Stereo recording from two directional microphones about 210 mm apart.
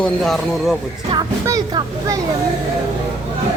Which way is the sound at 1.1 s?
15° right (ahead or behind).